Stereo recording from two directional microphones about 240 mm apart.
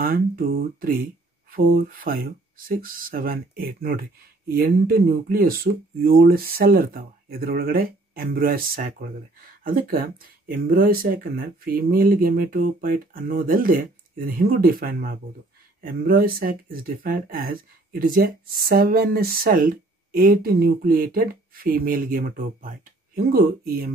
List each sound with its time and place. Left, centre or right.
0.0 s speech: right